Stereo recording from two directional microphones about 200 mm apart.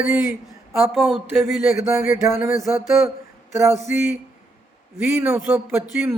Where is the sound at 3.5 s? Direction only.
15° right (ahead or behind).